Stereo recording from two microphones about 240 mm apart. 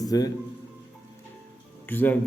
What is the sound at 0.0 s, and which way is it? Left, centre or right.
Speech, centre.